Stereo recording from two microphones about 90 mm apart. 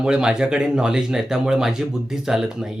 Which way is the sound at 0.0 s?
10° right (ahead or behind).